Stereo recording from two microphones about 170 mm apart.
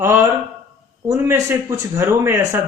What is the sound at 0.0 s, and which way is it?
Speech, 15° right (ahead or behind).